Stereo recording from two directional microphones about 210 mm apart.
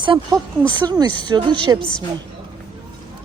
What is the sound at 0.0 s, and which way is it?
Speech, 20° right (ahead or behind).